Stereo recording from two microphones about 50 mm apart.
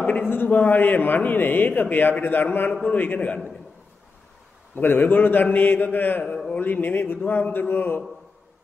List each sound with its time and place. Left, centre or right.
0.0 s a sound: left
0.3 s a man's voice: left
4.7 s a man's voice: left
6.2 s a man's voice: centre
6.6 s a man's voice: left